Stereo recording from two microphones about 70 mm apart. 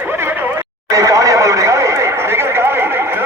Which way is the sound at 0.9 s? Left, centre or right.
Right.